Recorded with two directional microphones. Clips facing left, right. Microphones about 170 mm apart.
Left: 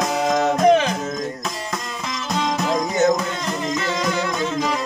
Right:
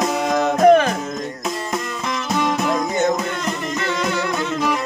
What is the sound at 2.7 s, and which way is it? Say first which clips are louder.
Music: left 1 dB; 10° left (ahead or behind).